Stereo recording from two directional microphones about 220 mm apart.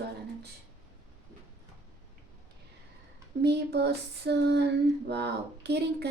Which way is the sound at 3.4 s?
50° right (ahead or behind).